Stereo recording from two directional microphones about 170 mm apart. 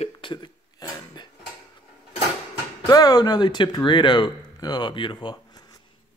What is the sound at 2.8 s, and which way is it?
Speech, 20° left (ahead or behind).